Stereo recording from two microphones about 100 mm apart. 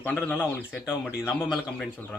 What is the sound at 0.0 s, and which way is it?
Speech, 15° left (ahead or behind).